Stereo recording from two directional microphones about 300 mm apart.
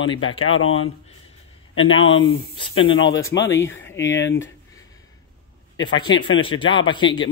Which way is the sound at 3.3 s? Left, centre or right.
Left.